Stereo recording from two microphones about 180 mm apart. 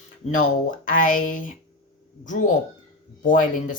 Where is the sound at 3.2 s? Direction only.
45° left (ahead or behind).